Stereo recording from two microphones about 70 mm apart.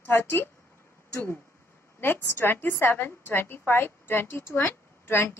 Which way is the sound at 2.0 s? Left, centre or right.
Left.